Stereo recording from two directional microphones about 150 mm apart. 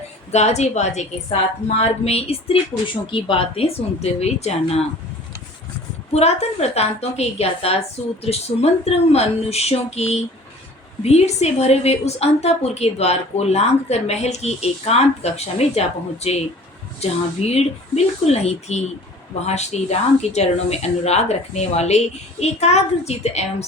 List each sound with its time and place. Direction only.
0.3 s a woman's voice: 45° left (ahead or behind)
6.1 s a woman's voice: 45° left (ahead or behind)